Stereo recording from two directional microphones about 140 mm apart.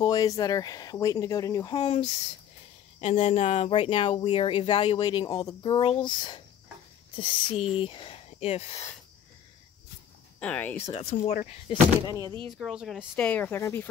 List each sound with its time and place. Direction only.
0.0 s speech: 25° left (ahead or behind)
1.8 s speech: 50° left (ahead or behind)
10.4 s speech: 10° left (ahead or behind)
11.0 s speech: 50° left (ahead or behind)
12.2 s speech: 30° right (ahead or behind)
12.5 s speech: centre (ahead or behind)
13.1 s speech: 10° left (ahead or behind)